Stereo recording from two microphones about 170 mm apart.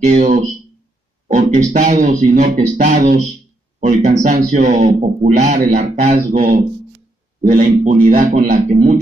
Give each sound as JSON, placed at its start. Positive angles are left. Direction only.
{"t": 0.0, "sound": "speech", "side_deg": -45}